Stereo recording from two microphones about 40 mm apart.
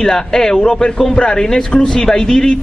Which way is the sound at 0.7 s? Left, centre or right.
Left.